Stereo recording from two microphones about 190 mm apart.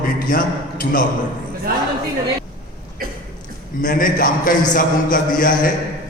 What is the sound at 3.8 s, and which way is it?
Speech, 45° left (ahead or behind).